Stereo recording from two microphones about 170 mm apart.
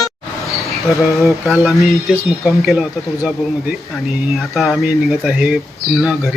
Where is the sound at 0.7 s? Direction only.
20° left (ahead or behind).